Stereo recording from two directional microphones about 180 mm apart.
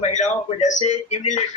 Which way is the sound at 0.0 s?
40° left (ahead or behind).